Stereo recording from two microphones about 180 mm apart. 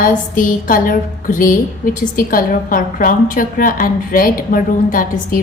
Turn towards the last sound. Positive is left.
turn(degrees=50)  # may be behind; listen again after turning